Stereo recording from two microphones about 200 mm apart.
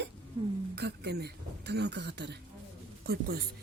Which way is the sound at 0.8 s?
55° right (ahead or behind).